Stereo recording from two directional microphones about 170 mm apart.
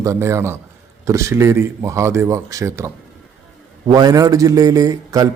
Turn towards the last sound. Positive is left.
turn(degrees=-20)  # may be behind; listen again after turning